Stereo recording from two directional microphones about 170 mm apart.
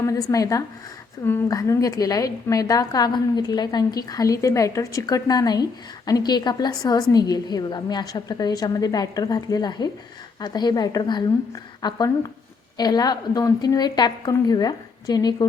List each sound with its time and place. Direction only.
0.0 s a woman's voice: 20° left (ahead or behind)